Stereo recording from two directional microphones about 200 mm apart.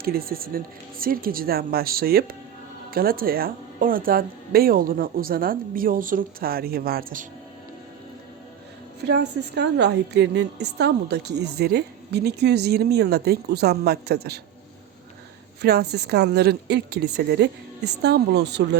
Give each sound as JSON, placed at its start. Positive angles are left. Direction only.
{"t": 0.0, "sound": "speech", "side_deg": -50}
{"t": 9.0, "sound": "a woman's voice", "side_deg": -60}
{"t": 15.6, "sound": "a woman's voice", "side_deg": -55}